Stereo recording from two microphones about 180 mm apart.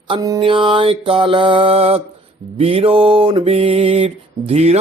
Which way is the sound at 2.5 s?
35° right (ahead or behind).